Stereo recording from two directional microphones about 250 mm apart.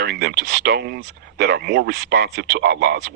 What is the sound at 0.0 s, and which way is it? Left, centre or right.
Speech, right.